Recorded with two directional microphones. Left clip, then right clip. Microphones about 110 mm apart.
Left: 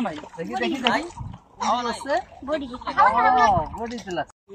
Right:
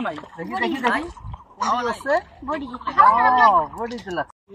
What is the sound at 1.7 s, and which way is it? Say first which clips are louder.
Speech: right 1 dB; 40° left (ahead or behind).